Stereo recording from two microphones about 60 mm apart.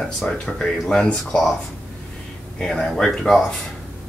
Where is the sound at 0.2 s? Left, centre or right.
Centre.